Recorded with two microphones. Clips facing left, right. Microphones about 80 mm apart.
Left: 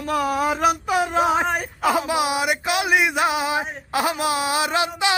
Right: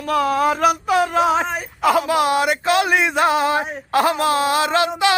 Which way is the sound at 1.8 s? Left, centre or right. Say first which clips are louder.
Right 5 dB; centre.